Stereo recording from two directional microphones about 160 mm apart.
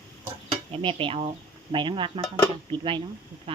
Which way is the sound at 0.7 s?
35° right (ahead or behind).